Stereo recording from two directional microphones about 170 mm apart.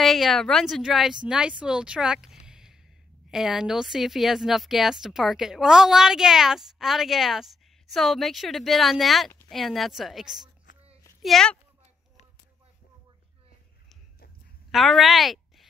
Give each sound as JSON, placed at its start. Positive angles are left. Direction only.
{"t": 0.0, "sound": "a woman's voice", "side_deg": 0}
{"t": 2.4, "sound": "a sound", "side_deg": -5}
{"t": 3.3, "sound": "a woman's voice", "side_deg": -5}
{"t": 14.7, "sound": "a woman's voice", "side_deg": 0}